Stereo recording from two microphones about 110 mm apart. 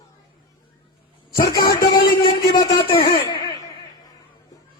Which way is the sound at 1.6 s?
40° left (ahead or behind).